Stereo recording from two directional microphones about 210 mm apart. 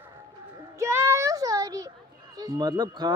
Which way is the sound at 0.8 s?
15° right (ahead or behind).